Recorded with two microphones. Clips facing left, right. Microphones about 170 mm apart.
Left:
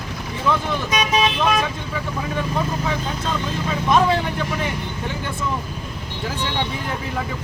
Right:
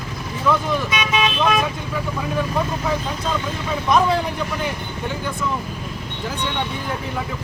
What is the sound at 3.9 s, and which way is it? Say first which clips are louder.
Speech: even; centre (ahead or behind).